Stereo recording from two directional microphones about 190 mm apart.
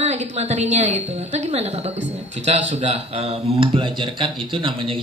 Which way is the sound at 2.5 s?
35° right (ahead or behind).